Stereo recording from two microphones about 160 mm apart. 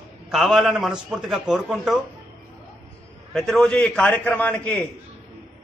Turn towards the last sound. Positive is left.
turn(degrees=10)  # may be behind; listen again after turning